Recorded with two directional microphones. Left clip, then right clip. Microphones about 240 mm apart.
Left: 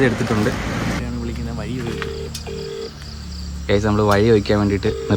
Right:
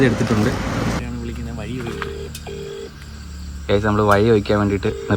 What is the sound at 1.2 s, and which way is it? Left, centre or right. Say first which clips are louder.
Music: left 2 dB; centre.